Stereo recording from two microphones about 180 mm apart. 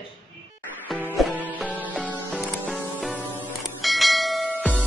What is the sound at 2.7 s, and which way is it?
Music, 5° left (ahead or behind).